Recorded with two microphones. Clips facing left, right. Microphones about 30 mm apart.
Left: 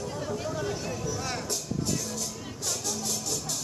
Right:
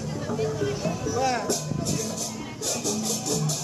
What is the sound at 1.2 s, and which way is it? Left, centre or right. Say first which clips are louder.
Music: right 8 dB; right.